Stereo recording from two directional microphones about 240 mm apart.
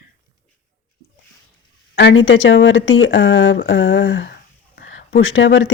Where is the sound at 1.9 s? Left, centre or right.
Left.